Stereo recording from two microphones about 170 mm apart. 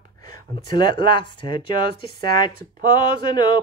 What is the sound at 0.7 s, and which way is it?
Speech, 30° left (ahead or behind).